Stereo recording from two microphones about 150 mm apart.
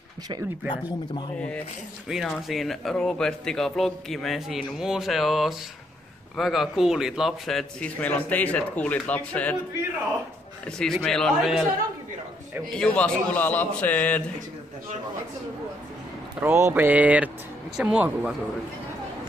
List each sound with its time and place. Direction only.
0.7 s speech: 30° left (ahead or behind)
2.0 s a man's voice: centre (ahead or behind)
10.6 s a man's voice: 5° left (ahead or behind)
12.7 s a man's voice: 5° left (ahead or behind)
16.3 s a sound: 15° right (ahead or behind)